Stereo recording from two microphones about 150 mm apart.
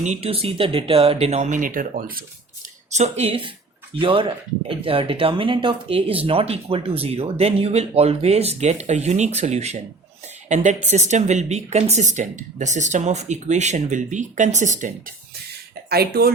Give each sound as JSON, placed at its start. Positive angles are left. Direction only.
{"t": 0.0, "sound": "speech", "side_deg": -45}
{"t": 2.9, "sound": "speech", "side_deg": -45}
{"t": 15.9, "sound": "speech", "side_deg": -90}